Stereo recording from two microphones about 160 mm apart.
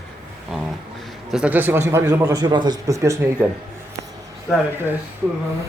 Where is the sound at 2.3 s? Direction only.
25° right (ahead or behind).